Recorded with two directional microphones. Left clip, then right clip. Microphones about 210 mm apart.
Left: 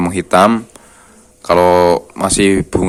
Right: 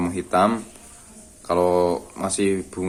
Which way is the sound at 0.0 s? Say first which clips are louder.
Left 9 dB; 45° left (ahead or behind).